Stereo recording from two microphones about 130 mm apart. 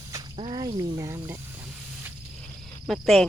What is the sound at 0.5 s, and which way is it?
Speech, 35° right (ahead or behind).